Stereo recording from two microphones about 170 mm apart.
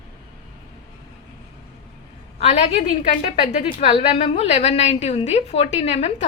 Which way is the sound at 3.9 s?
40° left (ahead or behind).